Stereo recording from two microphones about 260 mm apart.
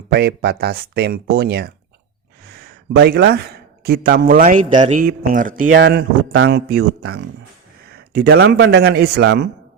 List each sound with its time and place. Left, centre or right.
0.1 s a man's voice: right
2.9 s a man's voice: right